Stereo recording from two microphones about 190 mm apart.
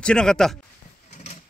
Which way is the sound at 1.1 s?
35° left (ahead or behind).